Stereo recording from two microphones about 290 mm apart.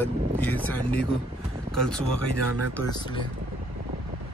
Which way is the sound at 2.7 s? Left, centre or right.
Centre.